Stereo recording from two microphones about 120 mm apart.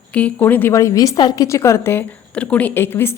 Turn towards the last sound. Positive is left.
turn(degrees=20)  # may be behind; listen again after turning